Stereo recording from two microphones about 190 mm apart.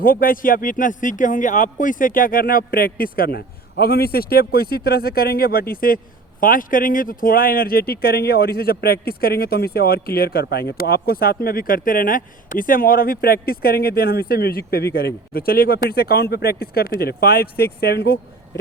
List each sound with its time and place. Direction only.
0.0 s speech: 50° left (ahead or behind)